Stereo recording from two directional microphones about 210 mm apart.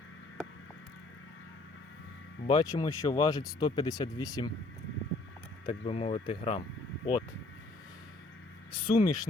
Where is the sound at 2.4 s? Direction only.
20° left (ahead or behind).